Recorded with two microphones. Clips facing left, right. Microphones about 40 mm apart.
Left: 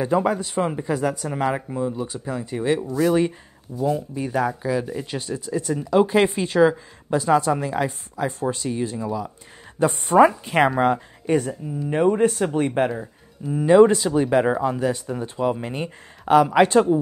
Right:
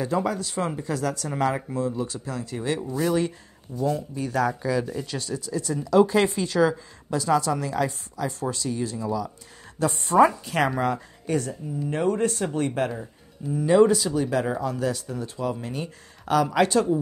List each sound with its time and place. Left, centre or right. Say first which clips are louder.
0.0 s speech: left 5 dB; left
10.1 s speech: left 3 dB; left